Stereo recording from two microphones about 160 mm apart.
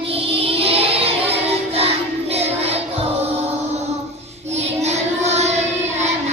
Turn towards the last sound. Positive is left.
turn(degrees=-45)  # may be behind; listen again after turning